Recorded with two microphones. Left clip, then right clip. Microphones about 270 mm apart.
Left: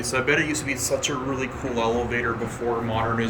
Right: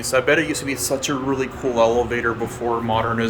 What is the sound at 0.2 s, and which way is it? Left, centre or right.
Speech, centre.